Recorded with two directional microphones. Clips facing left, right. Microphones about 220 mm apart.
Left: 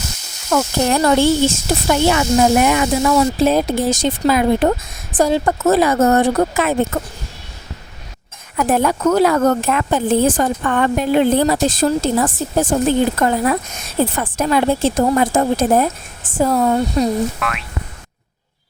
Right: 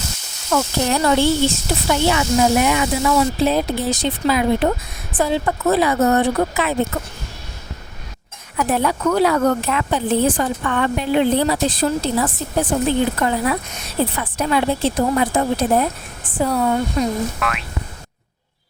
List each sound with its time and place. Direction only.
0.5 s speech: 45° left (ahead or behind)
8.5 s a woman's voice: 45° left (ahead or behind)
17.4 s boing: centre (ahead or behind)